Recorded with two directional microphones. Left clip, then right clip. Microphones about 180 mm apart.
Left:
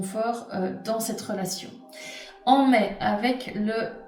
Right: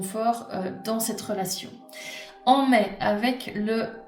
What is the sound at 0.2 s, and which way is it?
Speech, 45° right (ahead or behind).